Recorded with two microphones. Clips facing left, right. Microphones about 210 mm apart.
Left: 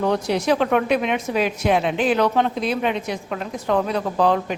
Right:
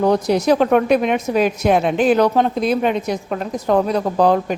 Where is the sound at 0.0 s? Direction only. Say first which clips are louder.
Right 5 dB; 40° right (ahead or behind).